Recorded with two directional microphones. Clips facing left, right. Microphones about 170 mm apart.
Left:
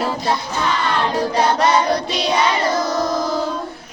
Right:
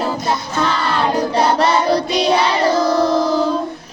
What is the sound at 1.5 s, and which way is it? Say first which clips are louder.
Child singing: right 2 dB; 30° right (ahead or behind).